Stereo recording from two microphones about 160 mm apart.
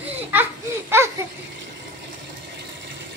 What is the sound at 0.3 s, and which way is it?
Baby laughter, 15° right (ahead or behind).